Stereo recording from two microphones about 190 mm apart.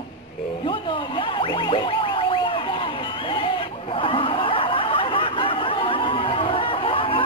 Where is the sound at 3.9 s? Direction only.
30° left (ahead or behind).